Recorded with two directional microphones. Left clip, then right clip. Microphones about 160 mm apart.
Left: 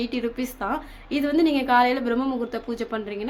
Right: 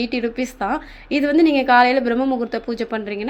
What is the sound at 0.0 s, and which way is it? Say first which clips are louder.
A woman's voice: right 5 dB; 25° right (ahead or behind).